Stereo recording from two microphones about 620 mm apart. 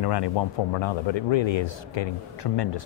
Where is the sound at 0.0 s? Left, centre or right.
Left.